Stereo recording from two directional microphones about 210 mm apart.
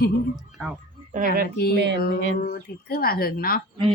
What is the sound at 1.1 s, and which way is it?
Speech, 40° right (ahead or behind).